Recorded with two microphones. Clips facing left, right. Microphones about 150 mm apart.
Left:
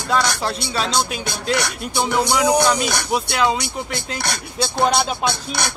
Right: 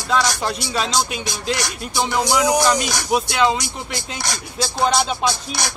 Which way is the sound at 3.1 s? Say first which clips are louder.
Right 3 dB; centre (ahead or behind).